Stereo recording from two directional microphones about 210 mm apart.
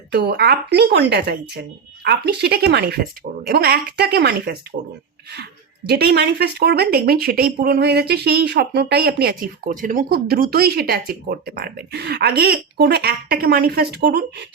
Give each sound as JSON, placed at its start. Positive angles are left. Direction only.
{"t": 0.1, "sound": "speech", "side_deg": -50}
{"t": 5.9, "sound": "speech", "side_deg": -50}